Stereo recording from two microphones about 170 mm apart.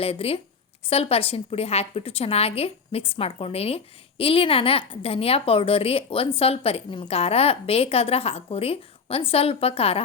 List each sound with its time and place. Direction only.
0.0 s a woman's voice: 35° left (ahead or behind)